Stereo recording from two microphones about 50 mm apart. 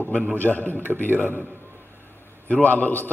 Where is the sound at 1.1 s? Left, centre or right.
Right.